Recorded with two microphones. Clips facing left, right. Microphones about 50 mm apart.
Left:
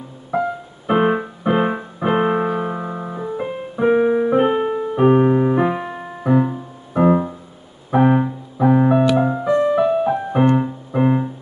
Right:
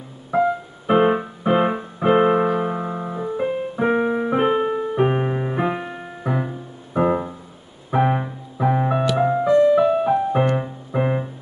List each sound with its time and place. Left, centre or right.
0.3 s music: centre
0.8 s keyboard: centre
9.2 s music: centre
9.5 s music: centre
9.8 s music: centre